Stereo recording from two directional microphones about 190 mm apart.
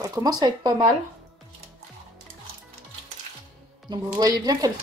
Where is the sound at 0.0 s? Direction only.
20° right (ahead or behind).